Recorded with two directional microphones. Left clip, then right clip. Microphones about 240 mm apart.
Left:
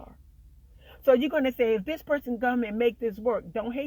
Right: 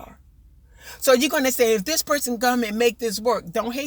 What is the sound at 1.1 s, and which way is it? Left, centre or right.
Speech, right.